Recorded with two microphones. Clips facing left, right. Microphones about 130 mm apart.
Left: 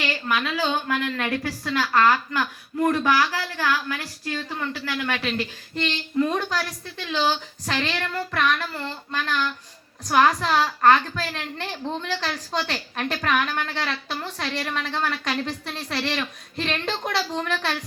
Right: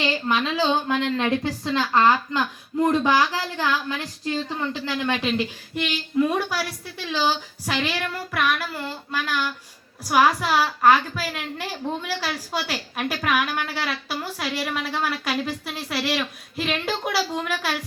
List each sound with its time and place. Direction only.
0.0 s a woman's voice: 25° right (ahead or behind); by 17.7 s 5° right (ahead or behind)